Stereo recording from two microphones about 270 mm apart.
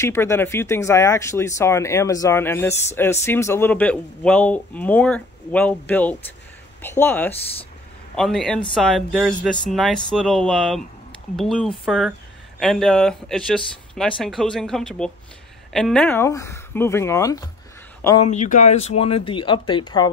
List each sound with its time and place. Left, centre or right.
0.0 s speech: centre
18.2 s speech: left